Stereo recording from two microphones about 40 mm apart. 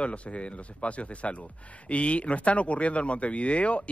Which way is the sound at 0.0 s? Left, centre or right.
Left.